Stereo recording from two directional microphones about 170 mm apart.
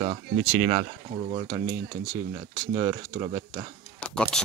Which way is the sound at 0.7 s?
25° right (ahead or behind).